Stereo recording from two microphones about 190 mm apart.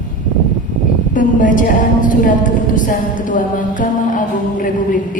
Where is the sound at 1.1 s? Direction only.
45° left (ahead or behind).